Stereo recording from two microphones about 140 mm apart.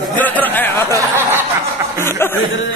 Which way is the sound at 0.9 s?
15° right (ahead or behind).